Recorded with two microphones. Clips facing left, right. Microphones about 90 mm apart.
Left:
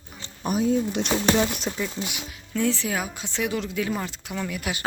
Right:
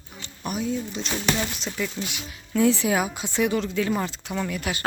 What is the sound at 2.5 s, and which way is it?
Speech, 10° right (ahead or behind).